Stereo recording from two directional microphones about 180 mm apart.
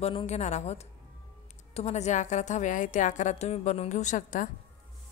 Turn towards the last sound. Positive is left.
turn(degrees=45)  # may be behind; listen again after turning